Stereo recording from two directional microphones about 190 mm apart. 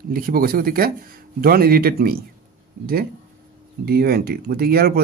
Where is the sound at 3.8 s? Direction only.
55° right (ahead or behind).